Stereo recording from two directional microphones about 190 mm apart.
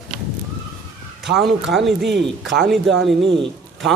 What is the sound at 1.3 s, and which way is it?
Speech, centre (ahead or behind).